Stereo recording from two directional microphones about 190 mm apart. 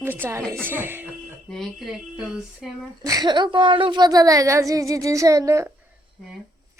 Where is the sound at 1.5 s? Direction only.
Centre (ahead or behind).